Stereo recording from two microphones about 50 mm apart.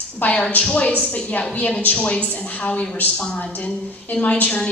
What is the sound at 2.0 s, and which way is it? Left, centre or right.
Speech, left.